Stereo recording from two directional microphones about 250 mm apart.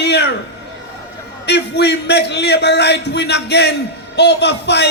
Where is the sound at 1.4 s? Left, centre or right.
Left.